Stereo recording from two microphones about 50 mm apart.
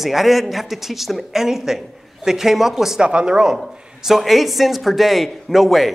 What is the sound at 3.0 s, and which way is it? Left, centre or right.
Speech, centre.